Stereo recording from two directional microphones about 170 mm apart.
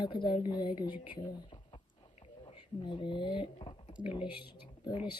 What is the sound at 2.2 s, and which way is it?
Speech, 30° left (ahead or behind).